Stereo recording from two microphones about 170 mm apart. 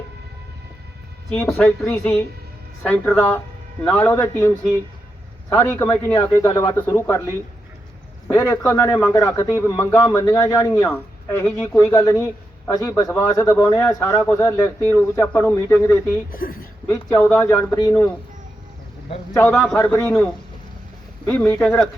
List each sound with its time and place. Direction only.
1.3 s a man's voice: 5° left (ahead or behind)
16.3 s speech: 60° left (ahead or behind)
16.9 s a man's voice: 15° left (ahead or behind)
19.3 s a man's voice: 10° left (ahead or behind)